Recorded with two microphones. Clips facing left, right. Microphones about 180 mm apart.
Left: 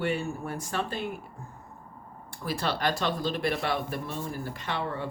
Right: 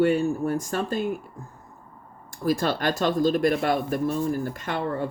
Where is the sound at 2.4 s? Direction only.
45° right (ahead or behind).